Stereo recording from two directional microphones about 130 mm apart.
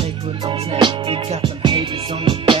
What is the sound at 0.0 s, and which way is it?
Music, 40° right (ahead or behind).